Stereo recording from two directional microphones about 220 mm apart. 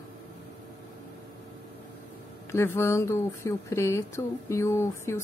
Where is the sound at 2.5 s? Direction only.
10° left (ahead or behind).